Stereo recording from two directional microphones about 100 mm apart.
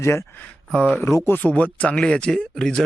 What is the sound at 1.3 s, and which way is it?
Speech, 15° left (ahead or behind).